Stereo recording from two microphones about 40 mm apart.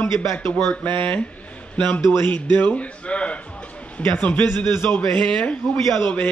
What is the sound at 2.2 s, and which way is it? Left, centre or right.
Speech, left.